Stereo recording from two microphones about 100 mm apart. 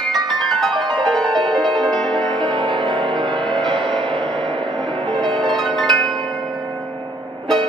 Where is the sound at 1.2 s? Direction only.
50° right (ahead or behind).